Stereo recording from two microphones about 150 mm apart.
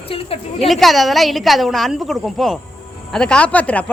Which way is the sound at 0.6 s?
Centre (ahead or behind).